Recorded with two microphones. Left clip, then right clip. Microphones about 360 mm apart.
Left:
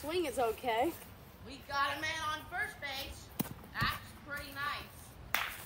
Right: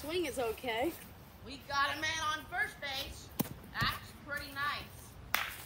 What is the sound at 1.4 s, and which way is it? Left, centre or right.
A woman's voice, centre.